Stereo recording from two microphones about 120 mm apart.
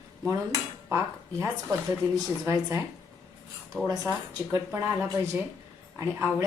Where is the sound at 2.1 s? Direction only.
30° right (ahead or behind).